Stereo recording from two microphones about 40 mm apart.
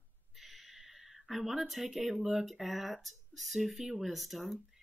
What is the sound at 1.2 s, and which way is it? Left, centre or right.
Speech, centre.